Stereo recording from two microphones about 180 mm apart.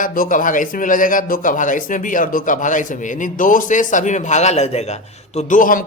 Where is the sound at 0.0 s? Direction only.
50° left (ahead or behind).